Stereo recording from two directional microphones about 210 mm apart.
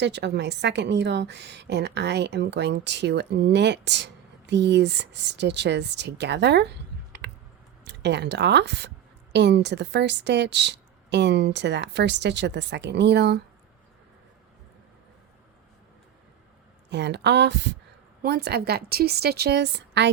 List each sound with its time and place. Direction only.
0.0 s a woman's voice: 55° right (ahead or behind)
16.9 s a woman's voice: 55° right (ahead or behind)